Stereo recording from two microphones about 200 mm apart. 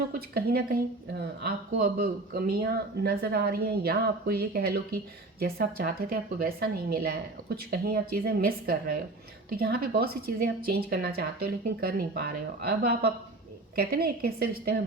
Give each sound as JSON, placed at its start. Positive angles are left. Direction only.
{"t": 0.1, "sound": "speech", "side_deg": -50}